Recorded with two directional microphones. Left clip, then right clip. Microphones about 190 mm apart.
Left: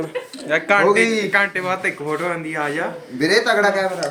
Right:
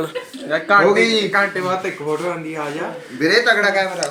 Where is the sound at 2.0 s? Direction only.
15° left (ahead or behind).